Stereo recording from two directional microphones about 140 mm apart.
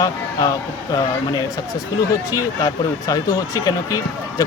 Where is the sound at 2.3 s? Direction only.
25° left (ahead or behind).